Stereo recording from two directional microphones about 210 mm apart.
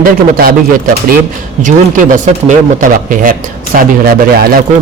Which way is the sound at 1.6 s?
35° right (ahead or behind).